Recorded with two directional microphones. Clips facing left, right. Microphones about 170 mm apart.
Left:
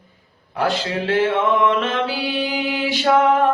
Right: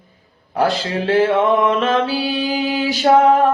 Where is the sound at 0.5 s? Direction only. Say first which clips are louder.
Right 3 dB; 35° right (ahead or behind).